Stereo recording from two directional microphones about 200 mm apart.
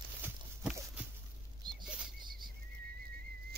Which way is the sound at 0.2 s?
5° right (ahead or behind).